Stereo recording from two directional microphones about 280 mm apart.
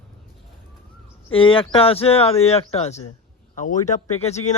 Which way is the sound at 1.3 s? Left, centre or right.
Centre.